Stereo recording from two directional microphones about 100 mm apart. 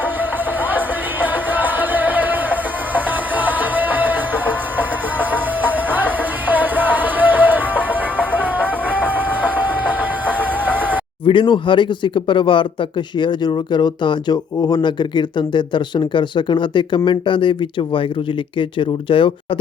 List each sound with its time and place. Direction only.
1.2 s music: 15° right (ahead or behind)
6.7 s music: 15° right (ahead or behind)
11.3 s speech: 55° left (ahead or behind)